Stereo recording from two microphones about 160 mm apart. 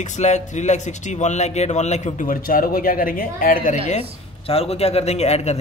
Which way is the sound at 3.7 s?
45° left (ahead or behind).